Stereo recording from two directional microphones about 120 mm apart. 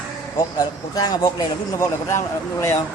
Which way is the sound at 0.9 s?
30° left (ahead or behind).